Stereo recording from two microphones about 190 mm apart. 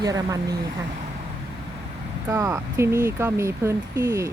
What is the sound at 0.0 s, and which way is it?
Speech, 20° right (ahead or behind).